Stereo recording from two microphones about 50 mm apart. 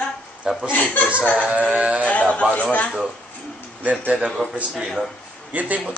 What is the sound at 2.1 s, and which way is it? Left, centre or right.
Speech, left.